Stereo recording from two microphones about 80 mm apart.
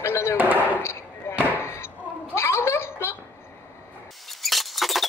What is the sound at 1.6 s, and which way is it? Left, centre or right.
Slam, left.